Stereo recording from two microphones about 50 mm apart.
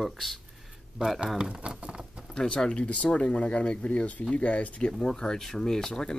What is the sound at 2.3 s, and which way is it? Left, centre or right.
Speech, centre.